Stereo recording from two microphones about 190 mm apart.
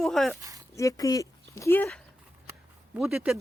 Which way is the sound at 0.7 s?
20° left (ahead or behind).